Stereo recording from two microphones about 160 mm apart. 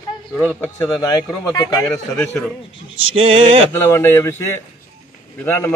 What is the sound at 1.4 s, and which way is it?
Speech, 25° left (ahead or behind).